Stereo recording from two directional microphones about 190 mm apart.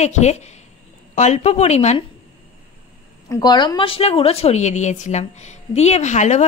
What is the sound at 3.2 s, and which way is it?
A woman's voice, 20° left (ahead or behind).